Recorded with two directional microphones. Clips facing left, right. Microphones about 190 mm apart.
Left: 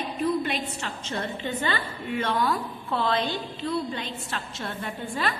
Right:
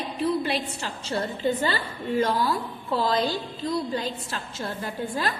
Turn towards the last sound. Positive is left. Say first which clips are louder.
# right 1 dB
turn(degrees=-35)  # may be behind; listen again after turning